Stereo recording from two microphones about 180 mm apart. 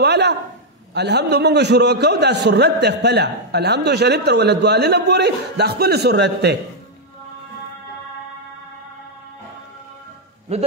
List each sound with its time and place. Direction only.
0.0 s a sound: 65° right (ahead or behind)
0.9 s a man's voice: 65° right (ahead or behind)
10.5 s a man's voice: 35° right (ahead or behind)